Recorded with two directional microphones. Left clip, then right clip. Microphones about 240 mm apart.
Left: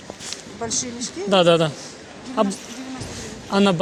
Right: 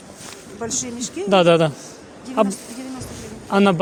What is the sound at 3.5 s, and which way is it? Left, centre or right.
Speech, centre.